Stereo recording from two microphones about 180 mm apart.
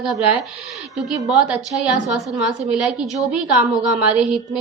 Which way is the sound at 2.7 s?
Centre (ahead or behind).